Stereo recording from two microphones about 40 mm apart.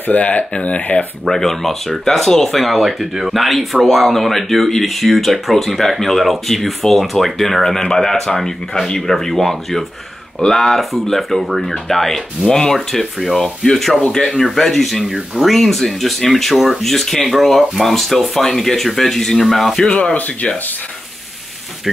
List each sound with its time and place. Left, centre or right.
0.1 s speech: left
1.2 s speech: centre
19.8 s speech: left